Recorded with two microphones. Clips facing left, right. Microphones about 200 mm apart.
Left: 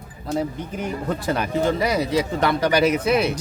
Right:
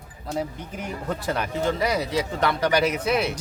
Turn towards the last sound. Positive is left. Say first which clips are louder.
# left 4 dB
turn(degrees=0)  # may be behind; listen again after turning